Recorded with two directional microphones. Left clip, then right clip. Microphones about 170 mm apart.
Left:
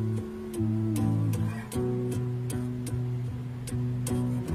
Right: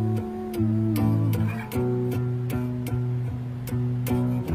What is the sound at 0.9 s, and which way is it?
Music, 30° right (ahead or behind).